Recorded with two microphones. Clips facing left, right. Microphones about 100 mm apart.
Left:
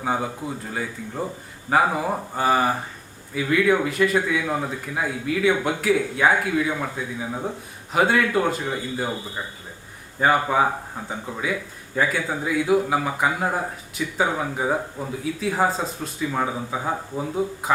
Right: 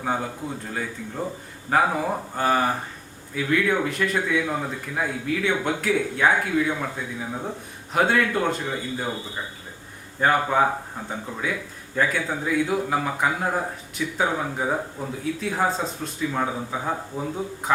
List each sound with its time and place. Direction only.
0.0 s speech: 5° left (ahead or behind)
10.2 s speech: 5° left (ahead or behind)